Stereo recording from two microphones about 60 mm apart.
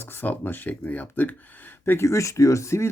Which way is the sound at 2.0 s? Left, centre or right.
Left.